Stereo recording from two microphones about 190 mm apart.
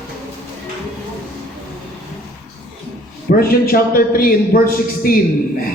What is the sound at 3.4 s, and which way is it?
A man's voice, 50° left (ahead or behind).